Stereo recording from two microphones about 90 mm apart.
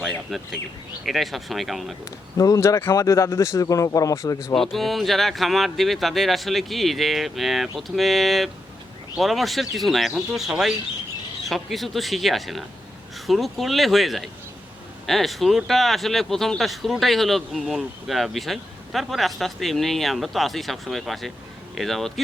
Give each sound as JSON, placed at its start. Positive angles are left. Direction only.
{"t": 0.1, "sound": "speech", "side_deg": 0}
{"t": 2.4, "sound": "speech", "side_deg": 40}
{"t": 4.5, "sound": "speech", "side_deg": 0}